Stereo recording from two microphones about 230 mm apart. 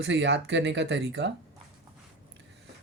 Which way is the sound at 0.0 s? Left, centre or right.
Right.